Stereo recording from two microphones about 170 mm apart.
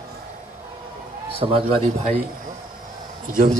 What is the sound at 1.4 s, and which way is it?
Speech, 30° right (ahead or behind).